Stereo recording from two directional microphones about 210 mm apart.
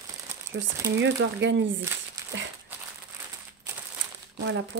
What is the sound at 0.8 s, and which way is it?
Speech, 55° right (ahead or behind).